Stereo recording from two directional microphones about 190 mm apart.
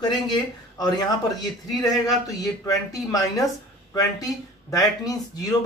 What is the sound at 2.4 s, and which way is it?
Speech, 20° left (ahead or behind).